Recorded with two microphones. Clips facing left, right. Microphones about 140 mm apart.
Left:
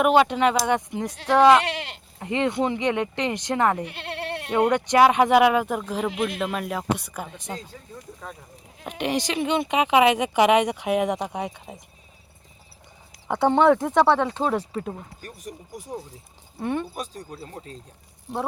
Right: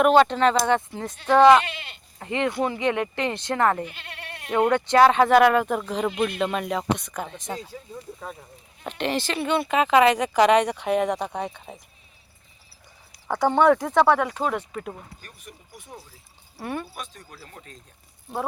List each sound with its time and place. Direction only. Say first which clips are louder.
0.0 s speech: right 1 dB; 10° left (ahead or behind)
1.6 s sheep: left 7 dB; 90° left
2.1 s speech: left 1 dB; 20° left (ahead or behind)
3.8 s goat: left 8 dB; 70° left (ahead or behind)
4.7 s speech: right 1 dB; 15° left (ahead or behind)
8.2 s speech: right 1 dB; 5° right (ahead or behind)
8.8 s speech: left 1 dB; 10° left (ahead or behind)
13.2 s speech: left 1 dB; 20° left (ahead or behind); by 16.0 s 40° left (ahead or behind)
16.6 s speech: left 4 dB; 20° left (ahead or behind)